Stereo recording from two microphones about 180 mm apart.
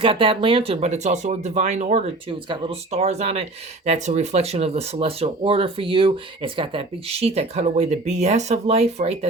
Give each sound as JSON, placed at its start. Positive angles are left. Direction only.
{"t": 0.0, "sound": "speech", "side_deg": -30}